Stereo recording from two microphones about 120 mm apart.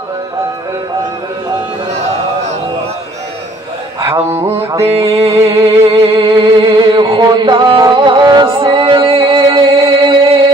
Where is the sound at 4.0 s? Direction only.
25° right (ahead or behind).